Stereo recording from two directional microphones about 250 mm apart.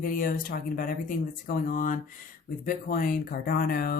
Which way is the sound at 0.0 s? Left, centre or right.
Left.